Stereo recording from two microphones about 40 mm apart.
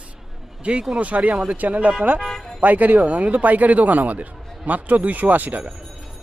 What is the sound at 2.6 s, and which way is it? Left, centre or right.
Speech, right.